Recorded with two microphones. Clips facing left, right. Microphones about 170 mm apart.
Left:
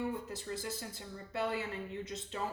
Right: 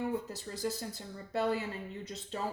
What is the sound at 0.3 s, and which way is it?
Speech, 40° right (ahead or behind).